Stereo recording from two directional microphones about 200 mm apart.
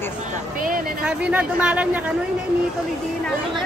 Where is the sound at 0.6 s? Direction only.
45° right (ahead or behind).